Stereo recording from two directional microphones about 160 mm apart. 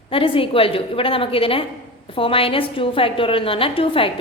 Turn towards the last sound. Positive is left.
turn(degrees=35)  # may be behind; listen again after turning